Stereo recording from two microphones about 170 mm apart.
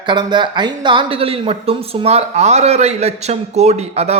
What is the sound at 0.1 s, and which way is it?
Speech, 25° right (ahead or behind).